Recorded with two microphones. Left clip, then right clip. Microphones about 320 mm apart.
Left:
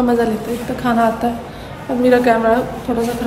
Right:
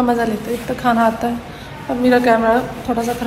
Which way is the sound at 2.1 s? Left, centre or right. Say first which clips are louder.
Left 1 dB; centre.